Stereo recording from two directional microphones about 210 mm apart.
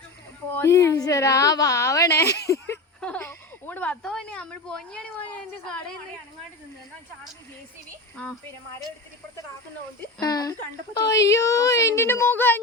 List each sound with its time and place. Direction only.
0.5 s a woman's voice: 15° left (ahead or behind)
2.5 s a sound: 10° left (ahead or behind)
10.2 s a woman's voice: 20° left (ahead or behind)